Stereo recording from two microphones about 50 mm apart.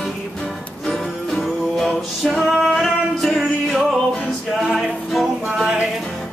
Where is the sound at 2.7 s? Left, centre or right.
Centre.